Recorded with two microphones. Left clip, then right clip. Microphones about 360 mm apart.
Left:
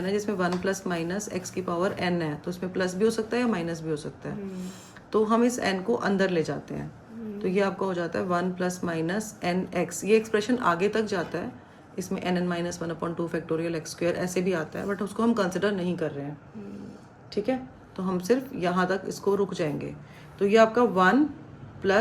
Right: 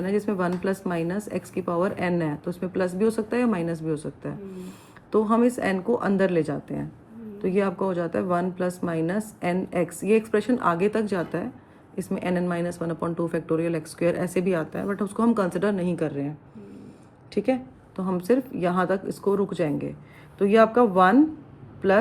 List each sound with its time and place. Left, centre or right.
0.0 s speech: centre
17.3 s speech: right